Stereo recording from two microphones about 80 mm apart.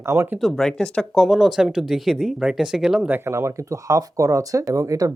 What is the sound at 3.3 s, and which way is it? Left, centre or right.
Speech, right.